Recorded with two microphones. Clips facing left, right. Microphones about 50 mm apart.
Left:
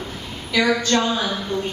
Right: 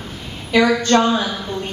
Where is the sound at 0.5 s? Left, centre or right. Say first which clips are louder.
Right 4 dB; right.